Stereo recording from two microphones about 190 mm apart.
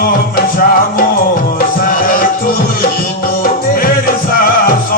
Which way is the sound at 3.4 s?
50° left (ahead or behind).